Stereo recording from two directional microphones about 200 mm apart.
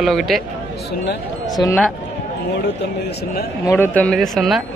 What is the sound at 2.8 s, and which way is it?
Speech, 55° left (ahead or behind).